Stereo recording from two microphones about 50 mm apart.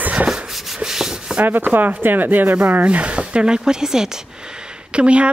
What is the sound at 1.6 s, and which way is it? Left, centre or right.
Speech, right.